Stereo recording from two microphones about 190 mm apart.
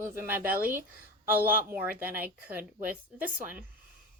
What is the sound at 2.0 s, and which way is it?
Speech, 10° right (ahead or behind).